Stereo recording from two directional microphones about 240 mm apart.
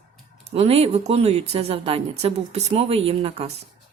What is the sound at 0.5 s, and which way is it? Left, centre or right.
A woman's voice, right.